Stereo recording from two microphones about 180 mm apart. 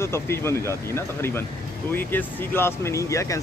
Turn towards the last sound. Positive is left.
turn(degrees=15)  # may be behind; listen again after turning